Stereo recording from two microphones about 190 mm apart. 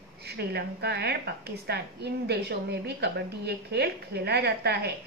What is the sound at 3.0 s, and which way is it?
A woman's voice, 60° right (ahead or behind).